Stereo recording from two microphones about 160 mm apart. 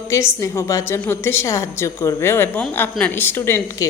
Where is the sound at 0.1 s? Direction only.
15° left (ahead or behind).